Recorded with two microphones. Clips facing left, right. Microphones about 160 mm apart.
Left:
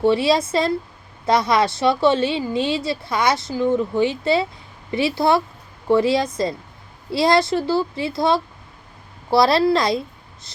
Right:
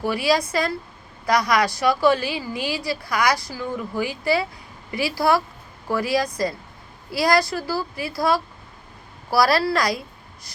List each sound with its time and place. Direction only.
0.0 s a woman's voice: 25° left (ahead or behind)